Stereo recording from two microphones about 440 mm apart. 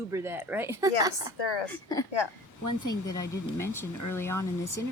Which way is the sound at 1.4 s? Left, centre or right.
Left.